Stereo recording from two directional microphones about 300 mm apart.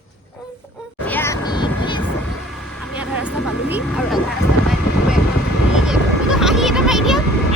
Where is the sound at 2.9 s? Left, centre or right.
Centre.